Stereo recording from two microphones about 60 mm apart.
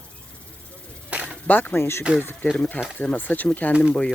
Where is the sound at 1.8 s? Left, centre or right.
Left.